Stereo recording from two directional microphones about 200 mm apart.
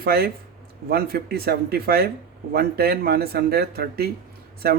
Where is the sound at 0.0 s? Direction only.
50° right (ahead or behind).